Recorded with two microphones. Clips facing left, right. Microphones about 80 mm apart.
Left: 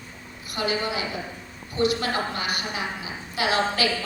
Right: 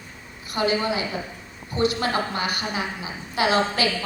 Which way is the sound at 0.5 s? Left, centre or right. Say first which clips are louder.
Right 4 dB; right.